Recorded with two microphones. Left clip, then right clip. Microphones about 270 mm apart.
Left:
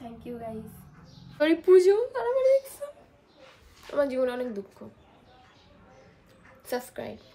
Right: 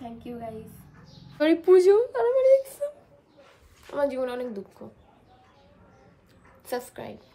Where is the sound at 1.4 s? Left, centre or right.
Centre.